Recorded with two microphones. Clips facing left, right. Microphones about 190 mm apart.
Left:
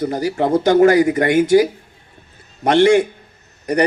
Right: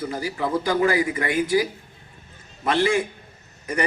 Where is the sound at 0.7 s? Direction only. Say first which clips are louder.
Left 11 dB; 45° left (ahead or behind).